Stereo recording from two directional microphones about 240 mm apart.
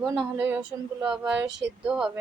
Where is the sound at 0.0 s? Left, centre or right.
Centre.